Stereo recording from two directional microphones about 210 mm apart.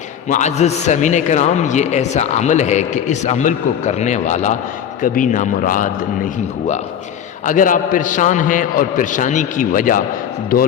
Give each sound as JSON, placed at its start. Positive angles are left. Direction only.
{"t": 0.3, "sound": "a man's voice", "side_deg": 35}